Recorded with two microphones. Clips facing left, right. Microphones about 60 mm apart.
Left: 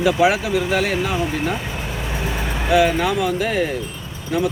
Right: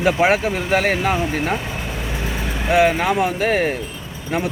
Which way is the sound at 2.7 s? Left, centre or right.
Right.